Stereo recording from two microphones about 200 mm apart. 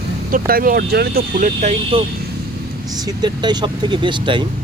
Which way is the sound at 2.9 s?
20° right (ahead or behind).